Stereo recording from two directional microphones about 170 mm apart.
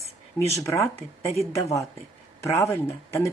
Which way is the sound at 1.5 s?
20° left (ahead or behind).